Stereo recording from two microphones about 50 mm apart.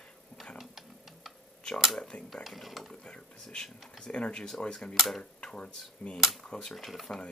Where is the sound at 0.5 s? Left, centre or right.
Centre.